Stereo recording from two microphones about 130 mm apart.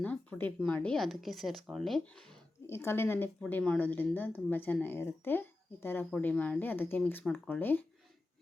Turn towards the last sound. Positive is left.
turn(degrees=15)  # may be behind; listen again after turning